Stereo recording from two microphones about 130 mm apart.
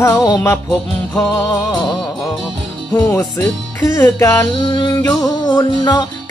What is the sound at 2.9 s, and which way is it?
Music, 20° left (ahead or behind).